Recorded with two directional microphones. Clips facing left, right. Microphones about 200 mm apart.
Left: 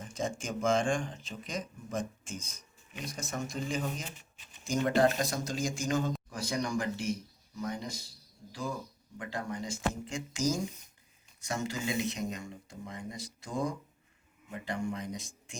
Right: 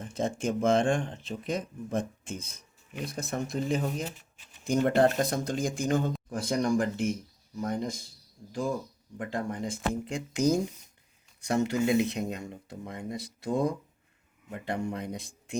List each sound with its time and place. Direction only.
0.0 s speech: 60° right (ahead or behind)
9.1 s speech: 50° right (ahead or behind)
14.9 s speech: 60° right (ahead or behind)